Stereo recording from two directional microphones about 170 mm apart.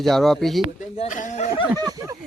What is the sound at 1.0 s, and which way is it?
Speech, 45° left (ahead or behind).